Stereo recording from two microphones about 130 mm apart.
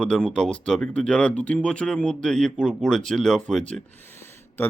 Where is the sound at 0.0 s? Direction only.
5° left (ahead or behind).